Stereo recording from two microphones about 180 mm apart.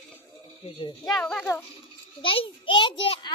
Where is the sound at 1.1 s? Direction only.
5° left (ahead or behind).